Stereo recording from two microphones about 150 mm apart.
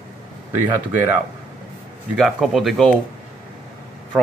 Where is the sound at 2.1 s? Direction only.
Centre (ahead or behind).